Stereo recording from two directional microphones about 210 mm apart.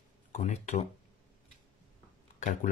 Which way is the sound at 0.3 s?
35° left (ahead or behind).